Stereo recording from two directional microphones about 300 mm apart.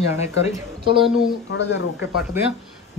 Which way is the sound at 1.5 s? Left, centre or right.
Left.